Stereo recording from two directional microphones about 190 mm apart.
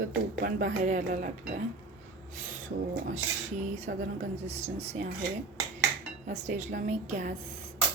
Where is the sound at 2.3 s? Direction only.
40° right (ahead or behind).